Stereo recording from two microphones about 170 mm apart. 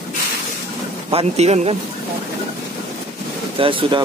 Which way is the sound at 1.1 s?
40° right (ahead or behind).